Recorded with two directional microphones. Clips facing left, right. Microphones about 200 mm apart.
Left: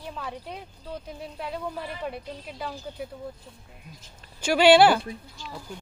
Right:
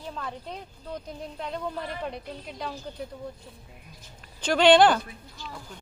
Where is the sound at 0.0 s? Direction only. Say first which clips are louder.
Even; 10° left (ahead or behind).